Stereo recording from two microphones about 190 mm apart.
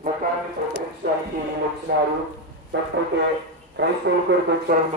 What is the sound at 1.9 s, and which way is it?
Speech, 60° right (ahead or behind).